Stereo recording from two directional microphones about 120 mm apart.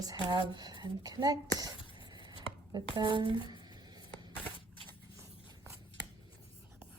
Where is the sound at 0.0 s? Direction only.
30° right (ahead or behind).